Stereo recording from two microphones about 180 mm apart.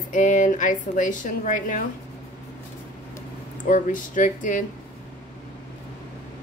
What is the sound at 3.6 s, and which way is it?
Speech, 45° left (ahead or behind).